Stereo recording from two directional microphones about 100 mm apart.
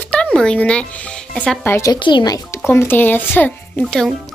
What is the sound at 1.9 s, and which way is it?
Speech, 50° left (ahead or behind).